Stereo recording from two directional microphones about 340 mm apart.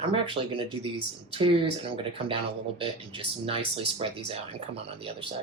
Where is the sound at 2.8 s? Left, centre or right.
Centre.